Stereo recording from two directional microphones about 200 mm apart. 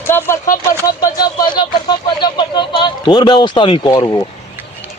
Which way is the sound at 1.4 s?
20° left (ahead or behind).